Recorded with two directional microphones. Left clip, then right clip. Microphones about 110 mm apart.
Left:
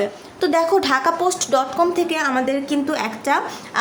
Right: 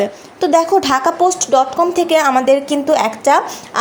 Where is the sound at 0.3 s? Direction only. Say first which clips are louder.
Right 5 dB; 25° right (ahead or behind).